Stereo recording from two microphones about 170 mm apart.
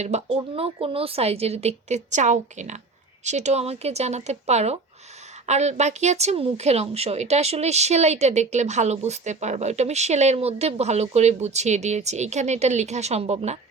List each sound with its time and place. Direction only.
0.0 s speech: 40° right (ahead or behind)